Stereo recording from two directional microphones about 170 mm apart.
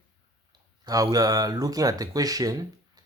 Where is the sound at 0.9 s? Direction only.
20° right (ahead or behind).